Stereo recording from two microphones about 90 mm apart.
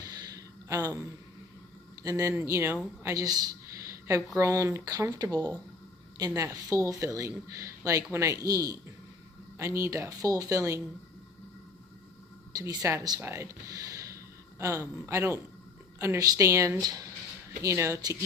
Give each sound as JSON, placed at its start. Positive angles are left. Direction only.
{"t": 0.0, "sound": "a sound", "side_deg": -45}
{"t": 2.0, "sound": "speech", "side_deg": -40}
{"t": 3.2, "sound": "a sound", "side_deg": -45}
{"t": 4.4, "sound": "speech", "side_deg": -35}
{"t": 12.5, "sound": "speech", "side_deg": -45}
{"t": 16.8, "sound": "speech", "side_deg": -45}
{"t": 17.6, "sound": "speech", "side_deg": -35}